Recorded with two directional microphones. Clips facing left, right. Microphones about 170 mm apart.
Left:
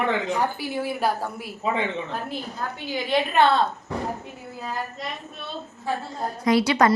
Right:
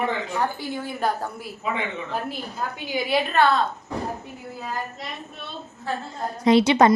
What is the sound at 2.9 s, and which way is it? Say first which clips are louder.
Speech: even; 10° right (ahead or behind).